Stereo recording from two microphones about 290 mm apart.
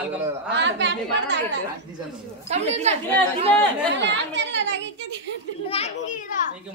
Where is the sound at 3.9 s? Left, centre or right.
Right.